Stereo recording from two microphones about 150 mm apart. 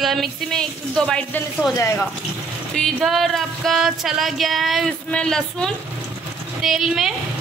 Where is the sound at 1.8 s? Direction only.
20° left (ahead or behind).